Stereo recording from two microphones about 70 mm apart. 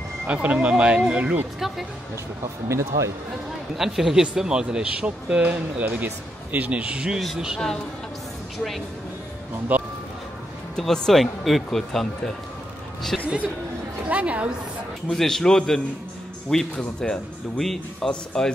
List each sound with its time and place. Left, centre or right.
0.3 s speech: centre
2.7 s speech: right
3.7 s speech: centre
9.7 s a sound: right
10.8 s speech: centre
13.1 s music: centre
14.0 s a woman's voice: centre
15.0 s speech: centre